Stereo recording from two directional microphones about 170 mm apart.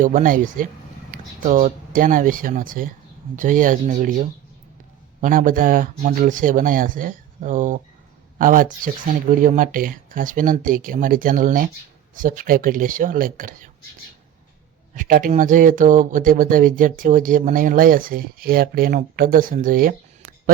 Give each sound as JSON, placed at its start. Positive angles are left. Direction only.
{"t": 0.0, "sound": "speech", "side_deg": -50}
{"t": 14.9, "sound": "speech", "side_deg": -50}